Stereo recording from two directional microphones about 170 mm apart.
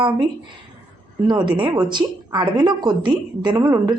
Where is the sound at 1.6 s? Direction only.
25° right (ahead or behind).